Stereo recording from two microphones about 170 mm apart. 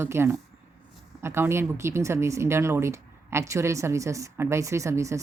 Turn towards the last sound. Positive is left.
turn(degrees=-15)  # may be behind; listen again after turning